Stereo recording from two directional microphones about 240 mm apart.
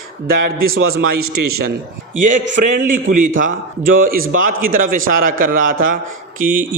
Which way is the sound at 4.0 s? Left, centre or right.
Right.